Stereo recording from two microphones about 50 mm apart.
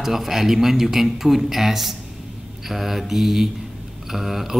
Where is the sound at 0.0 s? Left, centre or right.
Centre.